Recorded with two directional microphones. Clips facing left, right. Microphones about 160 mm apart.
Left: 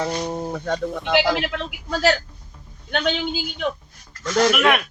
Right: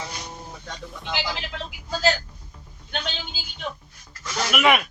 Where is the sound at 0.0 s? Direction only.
55° left (ahead or behind).